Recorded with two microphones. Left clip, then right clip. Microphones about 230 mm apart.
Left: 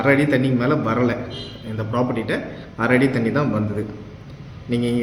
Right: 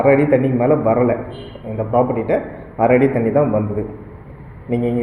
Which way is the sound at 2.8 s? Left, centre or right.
Centre.